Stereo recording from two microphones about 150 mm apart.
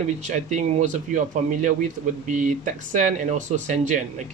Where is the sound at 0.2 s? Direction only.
55° right (ahead or behind).